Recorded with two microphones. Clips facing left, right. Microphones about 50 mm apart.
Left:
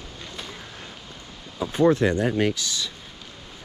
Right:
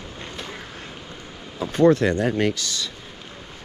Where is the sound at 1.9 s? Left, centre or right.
Right.